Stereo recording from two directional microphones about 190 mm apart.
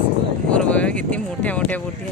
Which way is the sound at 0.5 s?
5° left (ahead or behind).